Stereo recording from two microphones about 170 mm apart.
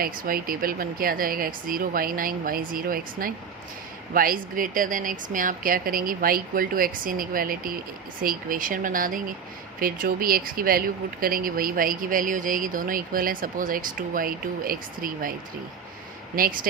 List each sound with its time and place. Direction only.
0.0 s speech: 60° right (ahead or behind)